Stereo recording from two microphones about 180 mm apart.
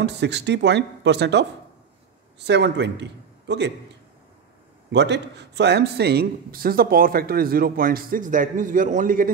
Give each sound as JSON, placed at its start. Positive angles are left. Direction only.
{"t": 0.0, "sound": "a man's voice", "side_deg": -70}
{"t": 4.9, "sound": "speech", "side_deg": -75}